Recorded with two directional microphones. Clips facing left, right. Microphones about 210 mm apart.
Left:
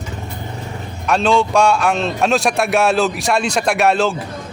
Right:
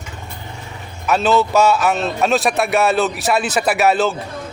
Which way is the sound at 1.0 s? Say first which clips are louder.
Even; 5° right (ahead or behind).